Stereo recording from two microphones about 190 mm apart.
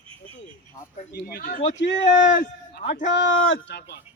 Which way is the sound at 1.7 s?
70° left (ahead or behind).